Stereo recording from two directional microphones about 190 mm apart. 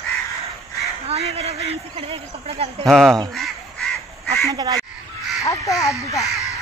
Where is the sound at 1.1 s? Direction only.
35° right (ahead or behind).